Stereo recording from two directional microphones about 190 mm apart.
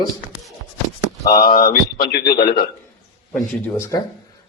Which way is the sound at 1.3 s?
50° left (ahead or behind).